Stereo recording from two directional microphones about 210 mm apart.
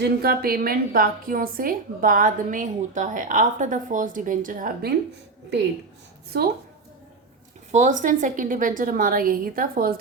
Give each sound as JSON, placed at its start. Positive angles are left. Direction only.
{"t": 0.0, "sound": "a woman's voice", "side_deg": -45}
{"t": 7.7, "sound": "a woman's voice", "side_deg": -35}